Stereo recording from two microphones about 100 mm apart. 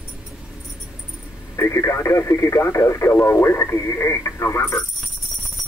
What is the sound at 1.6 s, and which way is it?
Speech, 25° left (ahead or behind).